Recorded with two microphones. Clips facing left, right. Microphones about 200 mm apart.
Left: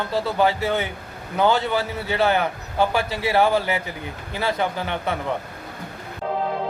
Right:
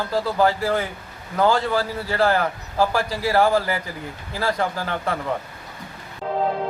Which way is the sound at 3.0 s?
25° left (ahead or behind).